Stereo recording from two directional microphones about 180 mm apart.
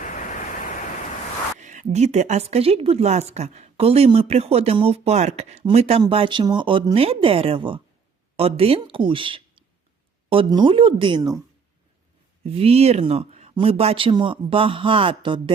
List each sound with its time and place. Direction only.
0.0 s pink noise: 45° left (ahead or behind)
1.5 s speech: 40° right (ahead or behind); by 11.3 s 25° right (ahead or behind)
12.5 s speech: 35° right (ahead or behind)